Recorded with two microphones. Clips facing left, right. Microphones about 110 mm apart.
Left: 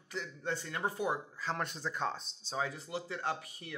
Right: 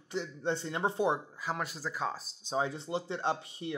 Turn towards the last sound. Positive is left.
turn(degrees=-25)  # may be behind; listen again after turning